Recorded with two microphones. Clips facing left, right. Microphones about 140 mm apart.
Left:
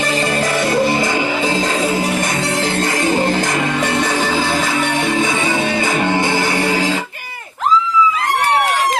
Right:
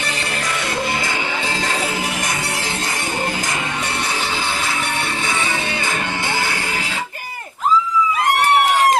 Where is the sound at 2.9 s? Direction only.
90° left.